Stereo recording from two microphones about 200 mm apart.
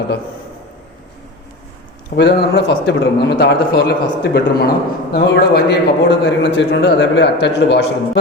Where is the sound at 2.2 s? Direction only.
55° left (ahead or behind).